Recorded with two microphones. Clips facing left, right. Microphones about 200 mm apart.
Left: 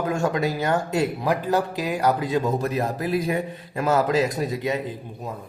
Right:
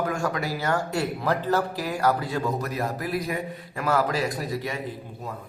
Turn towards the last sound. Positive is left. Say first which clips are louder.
# left 5 dB
turn(degrees=20)  # may be behind; listen again after turning